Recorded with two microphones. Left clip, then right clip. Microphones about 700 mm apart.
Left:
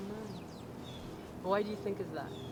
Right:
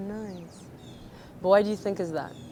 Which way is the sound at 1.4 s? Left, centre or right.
Right.